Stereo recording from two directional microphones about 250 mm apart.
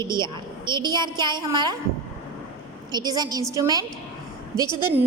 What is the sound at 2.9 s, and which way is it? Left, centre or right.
Speech, centre.